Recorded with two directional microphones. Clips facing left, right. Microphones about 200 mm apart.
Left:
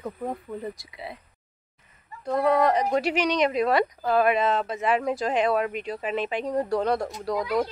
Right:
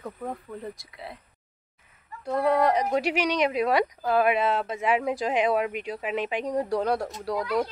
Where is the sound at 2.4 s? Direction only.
10° right (ahead or behind).